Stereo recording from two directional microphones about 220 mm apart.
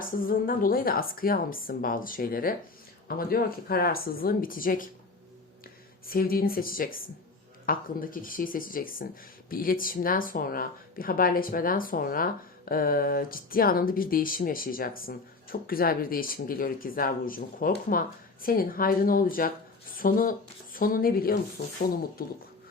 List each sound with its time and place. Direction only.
0.0 s speech: 40° left (ahead or behind)
6.1 s speech: 40° left (ahead or behind)